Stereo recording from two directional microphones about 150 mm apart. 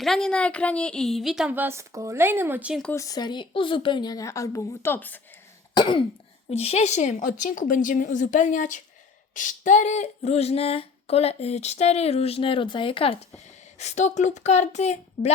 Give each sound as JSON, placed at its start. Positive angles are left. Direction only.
{"t": 0.0, "sound": "a woman's voice", "side_deg": 5}
{"t": 2.9, "sound": "speech", "side_deg": 20}
{"t": 5.7, "sound": "cough", "side_deg": 30}
{"t": 6.5, "sound": "a woman's voice", "side_deg": 45}
{"t": 9.3, "sound": "female singing", "side_deg": 60}